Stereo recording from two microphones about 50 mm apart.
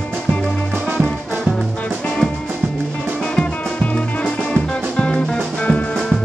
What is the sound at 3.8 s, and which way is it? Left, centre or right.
Music, left.